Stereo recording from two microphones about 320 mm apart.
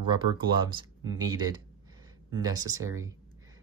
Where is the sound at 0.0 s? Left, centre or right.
Centre.